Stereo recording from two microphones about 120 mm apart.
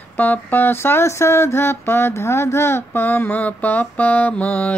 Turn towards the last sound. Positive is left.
turn(degrees=10)  # may be behind; listen again after turning